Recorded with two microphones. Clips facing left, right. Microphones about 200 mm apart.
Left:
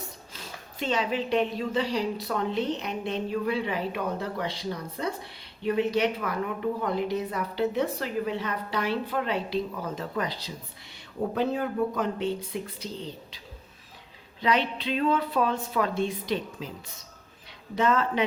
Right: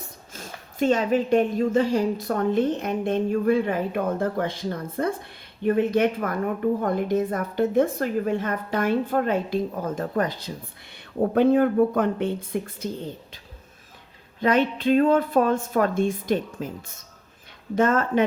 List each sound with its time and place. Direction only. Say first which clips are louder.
0.3 s a woman's voice: right 9 dB; 45° right (ahead or behind)
14.4 s a woman's voice: right 6 dB; 50° right (ahead or behind)